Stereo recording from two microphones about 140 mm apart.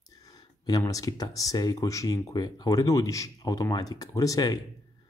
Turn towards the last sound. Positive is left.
turn(degrees=25)  # may be behind; listen again after turning